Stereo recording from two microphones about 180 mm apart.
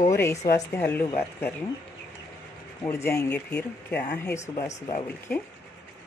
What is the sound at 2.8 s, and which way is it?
Speech, 15° left (ahead or behind).